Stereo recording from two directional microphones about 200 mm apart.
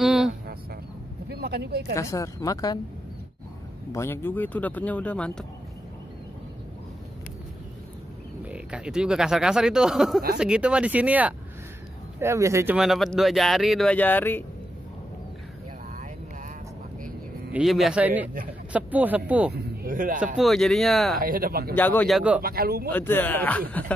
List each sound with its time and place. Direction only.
0.0 s a sound: centre (ahead or behind)
1.3 s speech: 55° right (ahead or behind)
2.0 s speech: 15° left (ahead or behind)
3.9 s speech: 10° left (ahead or behind)
8.5 s speech: 5° right (ahead or behind)
12.7 s speech: centre (ahead or behind)
17.5 s speech: 5° right (ahead or behind)
19.5 s speech: 50° right (ahead or behind)
20.3 s speech: centre (ahead or behind)
21.2 s speech: 45° right (ahead or behind)
21.7 s speech: 10° left (ahead or behind)
22.4 s speech: 50° right (ahead or behind)
22.8 s speech: 10° left (ahead or behind)